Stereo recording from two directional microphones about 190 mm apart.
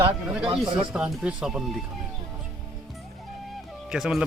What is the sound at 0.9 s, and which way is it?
Speech, 5° right (ahead or behind).